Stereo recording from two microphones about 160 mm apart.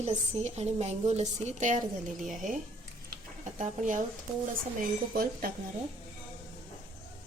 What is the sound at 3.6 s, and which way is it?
Speech, 50° right (ahead or behind).